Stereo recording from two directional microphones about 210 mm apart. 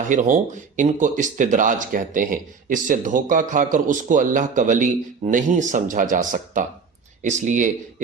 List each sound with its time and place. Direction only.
0.1 s speech: 35° right (ahead or behind)